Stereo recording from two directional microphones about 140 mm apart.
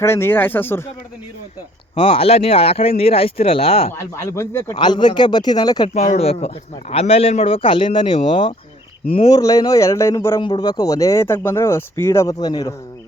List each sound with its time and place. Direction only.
0.0 s speech: 15° left (ahead or behind)
2.0 s speech: 40° left (ahead or behind)
3.9 s speech: 20° left (ahead or behind)
4.7 s speech: 35° left (ahead or behind)
5.9 s speech: 55° left (ahead or behind)
9.3 s speech: 25° left (ahead or behind)
10.4 s speech: 30° left (ahead or behind)